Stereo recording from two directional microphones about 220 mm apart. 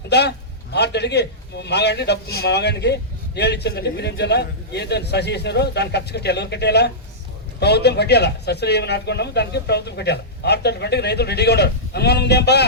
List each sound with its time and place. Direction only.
0.1 s a man's voice: 50° left (ahead or behind)